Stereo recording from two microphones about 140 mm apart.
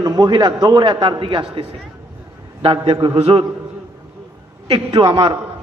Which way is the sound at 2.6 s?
40° right (ahead or behind).